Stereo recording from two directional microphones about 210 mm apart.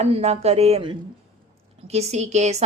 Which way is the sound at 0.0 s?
30° right (ahead or behind).